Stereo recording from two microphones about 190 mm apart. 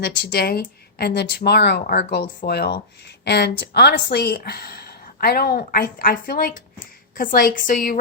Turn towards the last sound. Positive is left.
turn(degrees=50)  # may be behind; listen again after turning